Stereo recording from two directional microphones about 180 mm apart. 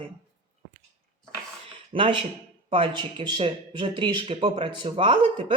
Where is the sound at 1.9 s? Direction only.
30° right (ahead or behind).